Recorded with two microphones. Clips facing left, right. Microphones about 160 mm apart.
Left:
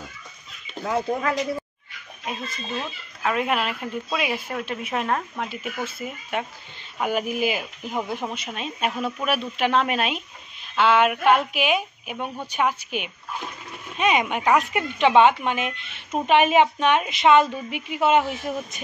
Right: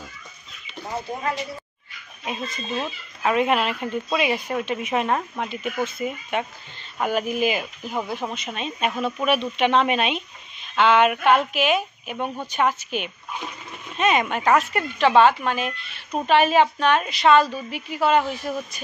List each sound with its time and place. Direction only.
0.8 s speech: 90° left
2.4 s speech: 25° right (ahead or behind)
3.2 s speech: centre (ahead or behind)
5.5 s speech: 5° left (ahead or behind); by 18.8 s 20° left (ahead or behind)